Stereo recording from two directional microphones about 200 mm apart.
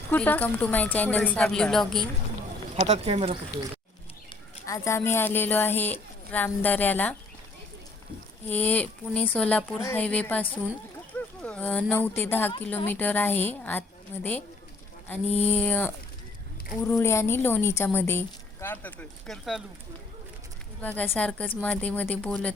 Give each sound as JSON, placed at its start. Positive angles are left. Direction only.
{"t": 0.1, "sound": "a woman's voice", "side_deg": 10}
{"t": 2.7, "sound": "speech", "side_deg": -30}
{"t": 4.3, "sound": "speech", "side_deg": 15}
{"t": 8.5, "sound": "a woman's voice", "side_deg": 10}
{"t": 20.8, "sound": "a woman's voice", "side_deg": 10}